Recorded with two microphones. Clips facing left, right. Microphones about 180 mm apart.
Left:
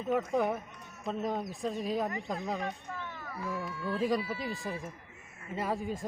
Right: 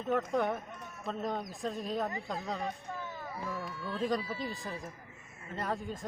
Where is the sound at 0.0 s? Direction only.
5° left (ahead or behind).